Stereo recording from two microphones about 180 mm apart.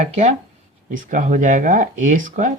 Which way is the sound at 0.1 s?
40° right (ahead or behind).